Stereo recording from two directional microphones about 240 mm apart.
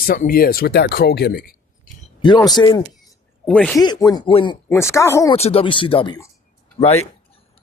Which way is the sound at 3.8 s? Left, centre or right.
Centre.